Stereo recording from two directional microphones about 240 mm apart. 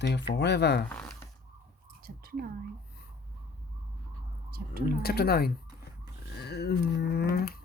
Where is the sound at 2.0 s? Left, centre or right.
Right.